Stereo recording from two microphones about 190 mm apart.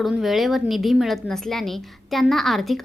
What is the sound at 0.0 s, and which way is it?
A woman's voice, centre (ahead or behind).